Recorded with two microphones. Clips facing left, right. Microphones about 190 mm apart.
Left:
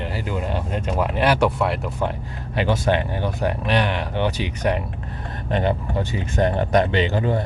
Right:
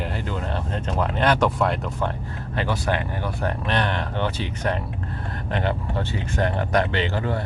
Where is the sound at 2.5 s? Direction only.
20° left (ahead or behind).